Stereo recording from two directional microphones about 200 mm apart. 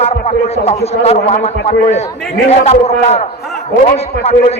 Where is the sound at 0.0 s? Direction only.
30° left (ahead or behind).